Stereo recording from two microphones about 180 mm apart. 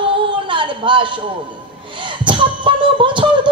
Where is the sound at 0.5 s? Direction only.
30° right (ahead or behind).